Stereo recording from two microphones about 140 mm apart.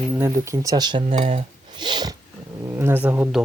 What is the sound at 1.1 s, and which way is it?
Speech, 55° right (ahead or behind).